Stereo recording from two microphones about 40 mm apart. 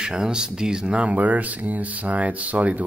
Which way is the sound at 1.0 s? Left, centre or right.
Right.